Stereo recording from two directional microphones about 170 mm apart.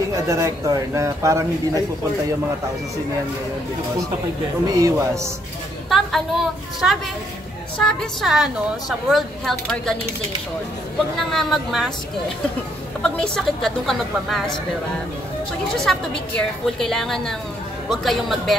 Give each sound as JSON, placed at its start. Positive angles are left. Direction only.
{"t": 0.1, "sound": "speech", "side_deg": -20}
{"t": 4.6, "sound": "speech", "side_deg": -20}
{"t": 5.9, "sound": "speech", "side_deg": 0}
{"t": 11.1, "sound": "speech", "side_deg": 0}
{"t": 13.0, "sound": "speech", "side_deg": 5}
{"t": 15.8, "sound": "speech", "side_deg": 5}